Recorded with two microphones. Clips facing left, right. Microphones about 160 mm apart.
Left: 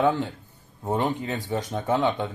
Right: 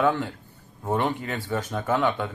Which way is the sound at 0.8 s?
20° left (ahead or behind).